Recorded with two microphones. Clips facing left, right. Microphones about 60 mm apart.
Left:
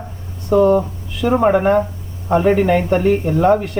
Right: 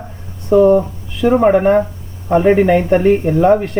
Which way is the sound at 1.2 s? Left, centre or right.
Centre.